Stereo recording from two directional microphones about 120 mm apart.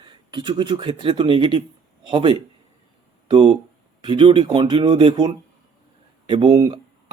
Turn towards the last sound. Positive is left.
turn(degrees=-45)  # may be behind; listen again after turning